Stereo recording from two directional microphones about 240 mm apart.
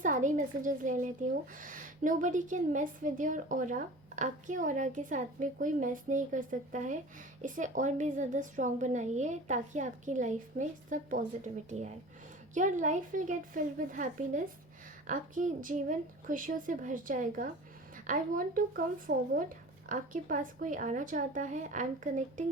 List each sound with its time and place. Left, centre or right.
0.0 s a woman's voice: right